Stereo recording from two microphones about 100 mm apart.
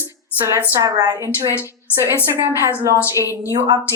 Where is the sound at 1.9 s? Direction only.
25° right (ahead or behind).